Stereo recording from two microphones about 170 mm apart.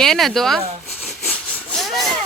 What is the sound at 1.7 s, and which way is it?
Sawing, centre (ahead or behind).